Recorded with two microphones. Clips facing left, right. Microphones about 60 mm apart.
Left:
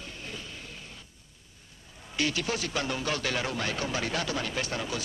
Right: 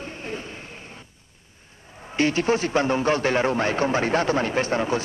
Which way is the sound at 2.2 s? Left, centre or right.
Right.